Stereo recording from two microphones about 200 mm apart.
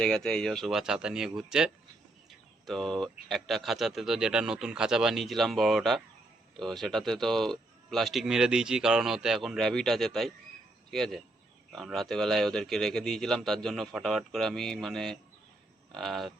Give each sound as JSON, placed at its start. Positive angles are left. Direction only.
{"t": 0.0, "sound": "speech", "side_deg": 5}